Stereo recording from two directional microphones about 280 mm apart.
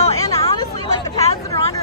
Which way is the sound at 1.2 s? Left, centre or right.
Left.